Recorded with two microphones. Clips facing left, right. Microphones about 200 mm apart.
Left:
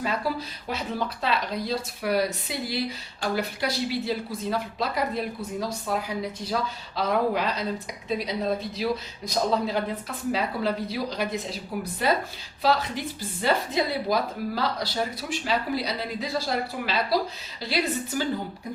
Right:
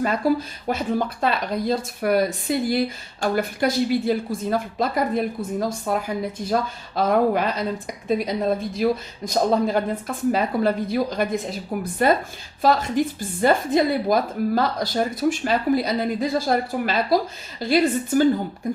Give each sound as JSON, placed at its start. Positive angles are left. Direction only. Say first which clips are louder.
{"t": 0.0, "sound": "speech", "louder": "right 7 dB", "side_deg": -50}